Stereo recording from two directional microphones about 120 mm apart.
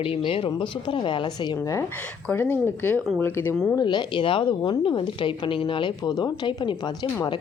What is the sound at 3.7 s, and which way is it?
A woman's voice, 40° left (ahead or behind).